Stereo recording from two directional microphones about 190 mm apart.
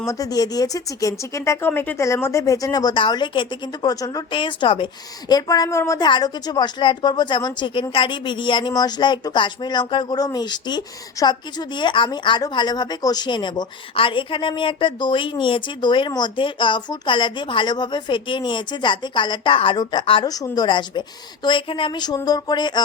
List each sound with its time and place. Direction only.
0.0 s a woman's voice: 15° left (ahead or behind)